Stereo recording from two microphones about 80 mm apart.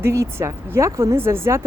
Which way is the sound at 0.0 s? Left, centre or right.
Right.